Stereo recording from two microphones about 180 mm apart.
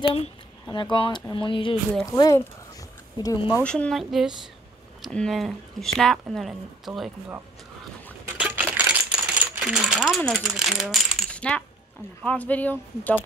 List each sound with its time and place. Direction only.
0.0 s speech: 30° left (ahead or behind)
3.5 s speech: 5° left (ahead or behind)
8.4 s a sound: 10° right (ahead or behind)
8.7 s crumpling: 5° right (ahead or behind)
10.2 s coin: centre (ahead or behind)
12.2 s speech: 10° left (ahead or behind)